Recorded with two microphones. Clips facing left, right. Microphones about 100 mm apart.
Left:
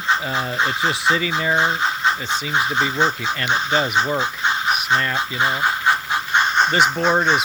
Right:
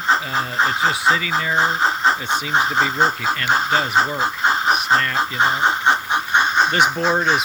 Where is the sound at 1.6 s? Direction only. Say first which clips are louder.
Right 2 dB; 35° right (ahead or behind).